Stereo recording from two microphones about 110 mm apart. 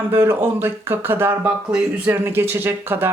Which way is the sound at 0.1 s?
20° right (ahead or behind).